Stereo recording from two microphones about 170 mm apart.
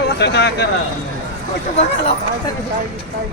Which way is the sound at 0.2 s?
80° left.